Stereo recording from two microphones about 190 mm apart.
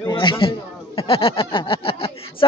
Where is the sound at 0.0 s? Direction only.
25° left (ahead or behind).